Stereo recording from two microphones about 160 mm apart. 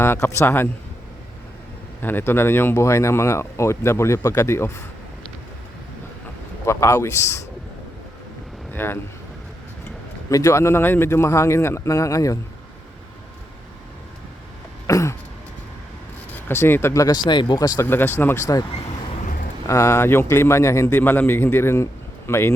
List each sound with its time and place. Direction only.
0.0 s speech: 15° left (ahead or behind)
2.0 s speech: 15° left (ahead or behind)
6.7 s speech: 15° left (ahead or behind)
8.7 s speech: 15° left (ahead or behind)
10.2 s speech: 20° left (ahead or behind)
14.8 s a sound: 20° left (ahead or behind)
16.5 s speech: 15° left (ahead or behind)
19.6 s speech: 15° left (ahead or behind)